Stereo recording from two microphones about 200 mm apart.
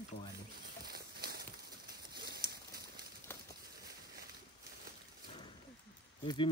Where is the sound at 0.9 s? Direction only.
50° right (ahead or behind).